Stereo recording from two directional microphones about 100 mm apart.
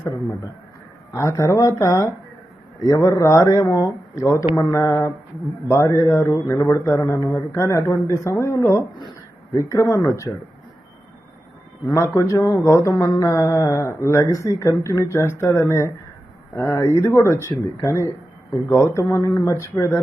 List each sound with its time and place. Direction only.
1.1 s a man's voice: 25° left (ahead or behind)
7.6 s a man's voice: 30° left (ahead or behind)
11.9 s a man's voice: 30° left (ahead or behind)